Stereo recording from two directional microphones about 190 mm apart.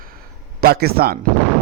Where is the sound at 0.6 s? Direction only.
55° right (ahead or behind).